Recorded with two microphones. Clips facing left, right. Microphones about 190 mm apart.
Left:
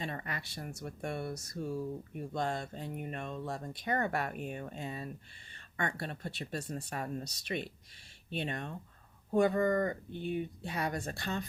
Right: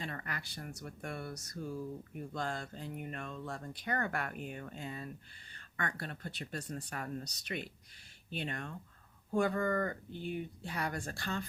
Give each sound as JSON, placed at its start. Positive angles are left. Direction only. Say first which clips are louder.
{"t": 0.0, "sound": "speech", "louder": "left 3 dB", "side_deg": 20}